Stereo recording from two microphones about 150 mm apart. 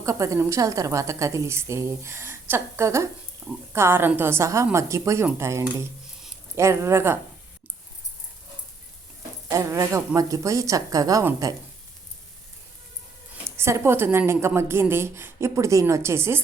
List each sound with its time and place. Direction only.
0.0 s a woman's voice: 20° right (ahead or behind)
9.5 s a woman's voice: 20° right (ahead or behind)
13.3 s a woman's voice: 15° right (ahead or behind)